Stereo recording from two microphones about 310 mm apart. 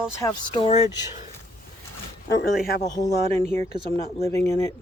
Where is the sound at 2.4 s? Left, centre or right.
Left.